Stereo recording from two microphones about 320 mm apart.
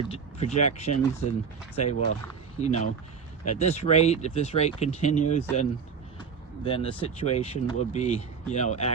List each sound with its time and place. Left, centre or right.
0.0 s speech: centre
6.7 s speech: centre